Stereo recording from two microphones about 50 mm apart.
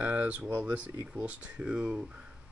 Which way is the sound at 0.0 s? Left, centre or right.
Right.